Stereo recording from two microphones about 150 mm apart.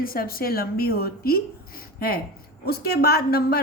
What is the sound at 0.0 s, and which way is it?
A woman's voice, 75° left (ahead or behind).